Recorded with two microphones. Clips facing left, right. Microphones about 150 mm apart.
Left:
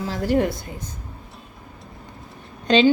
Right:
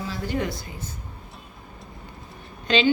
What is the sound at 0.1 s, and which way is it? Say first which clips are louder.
Speech: left 8 dB; 65° left (ahead or behind).